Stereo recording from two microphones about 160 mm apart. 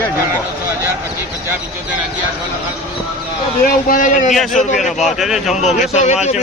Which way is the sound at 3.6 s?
55° left (ahead or behind).